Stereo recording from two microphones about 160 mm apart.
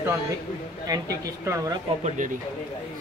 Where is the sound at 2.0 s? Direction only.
55° right (ahead or behind).